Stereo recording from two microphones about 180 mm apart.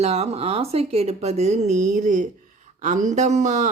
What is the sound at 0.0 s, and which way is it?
Speech, 35° right (ahead or behind).